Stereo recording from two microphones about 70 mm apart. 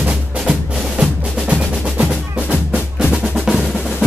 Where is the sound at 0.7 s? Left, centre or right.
Centre.